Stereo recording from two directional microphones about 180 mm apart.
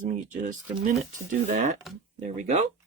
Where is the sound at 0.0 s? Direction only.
45° right (ahead or behind).